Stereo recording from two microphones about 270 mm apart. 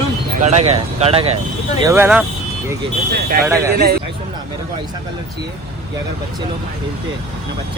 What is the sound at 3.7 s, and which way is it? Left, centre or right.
Speech, right.